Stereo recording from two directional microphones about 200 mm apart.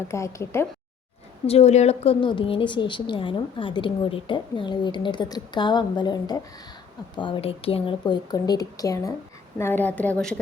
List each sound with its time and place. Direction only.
0.1 s a woman's voice: 15° left (ahead or behind)
1.5 s a woman's voice: 30° left (ahead or behind); by 10.4 s 5° left (ahead or behind)